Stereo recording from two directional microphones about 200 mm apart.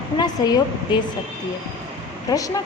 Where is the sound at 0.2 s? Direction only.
20° left (ahead or behind).